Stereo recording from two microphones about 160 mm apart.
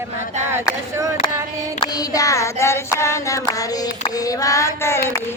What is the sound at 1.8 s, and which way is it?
Child singing, 25° left (ahead or behind).